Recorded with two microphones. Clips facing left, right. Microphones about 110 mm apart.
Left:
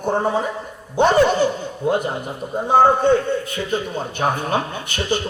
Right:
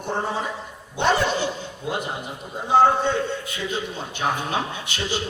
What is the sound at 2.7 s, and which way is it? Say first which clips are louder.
A man's voice: left 4 dB; 50° left (ahead or behind).